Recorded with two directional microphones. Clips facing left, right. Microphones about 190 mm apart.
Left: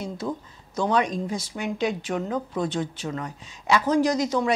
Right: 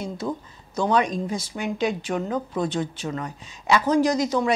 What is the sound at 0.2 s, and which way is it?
Speech, 25° right (ahead or behind).